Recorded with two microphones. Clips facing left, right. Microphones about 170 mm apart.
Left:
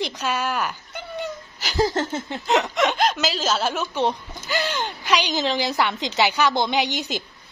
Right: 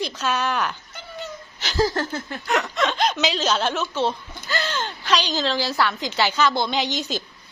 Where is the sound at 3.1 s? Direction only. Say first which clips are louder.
Right 1 dB; 5° left (ahead or behind).